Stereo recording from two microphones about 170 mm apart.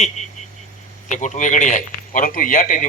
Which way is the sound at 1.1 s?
45° left (ahead or behind).